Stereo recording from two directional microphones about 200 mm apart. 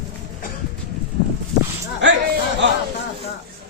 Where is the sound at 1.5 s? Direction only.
55° right (ahead or behind).